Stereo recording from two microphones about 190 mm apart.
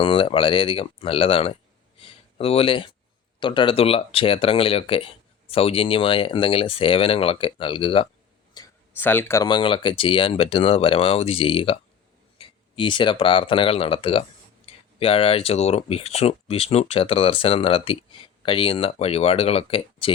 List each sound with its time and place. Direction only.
0.0 s speech: 30° left (ahead or behind)
8.6 s a sound: 20° left (ahead or behind)
9.0 s speech: 10° left (ahead or behind)
9.5 s speech: 25° left (ahead or behind)